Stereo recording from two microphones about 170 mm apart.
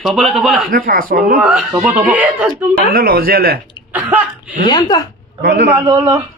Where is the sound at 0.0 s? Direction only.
Centre (ahead or behind).